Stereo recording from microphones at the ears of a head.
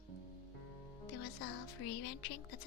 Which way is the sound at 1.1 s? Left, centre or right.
Left.